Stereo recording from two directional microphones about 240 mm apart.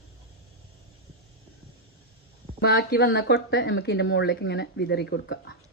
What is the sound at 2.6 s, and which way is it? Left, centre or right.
Speech, left.